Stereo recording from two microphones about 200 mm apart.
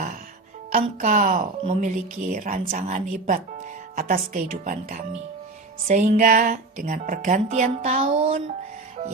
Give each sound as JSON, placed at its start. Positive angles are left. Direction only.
{"t": 0.7, "sound": "speech", "side_deg": -35}